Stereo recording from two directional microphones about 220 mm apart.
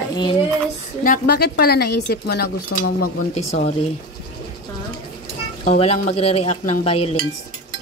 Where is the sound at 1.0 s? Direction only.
40° left (ahead or behind).